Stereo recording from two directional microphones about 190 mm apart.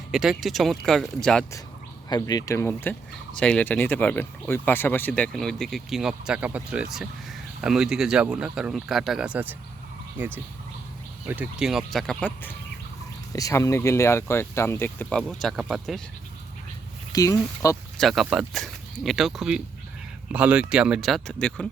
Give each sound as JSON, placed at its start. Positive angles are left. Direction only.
{"t": 0.1, "sound": "speech", "side_deg": 0}
{"t": 2.0, "sound": "speech", "side_deg": 20}
{"t": 17.1, "sound": "speech", "side_deg": 20}
{"t": 18.0, "sound": "speech", "side_deg": 0}